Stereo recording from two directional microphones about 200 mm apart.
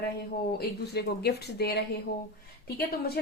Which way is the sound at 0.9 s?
55° left (ahead or behind).